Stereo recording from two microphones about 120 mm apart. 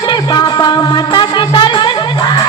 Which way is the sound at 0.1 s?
35° left (ahead or behind).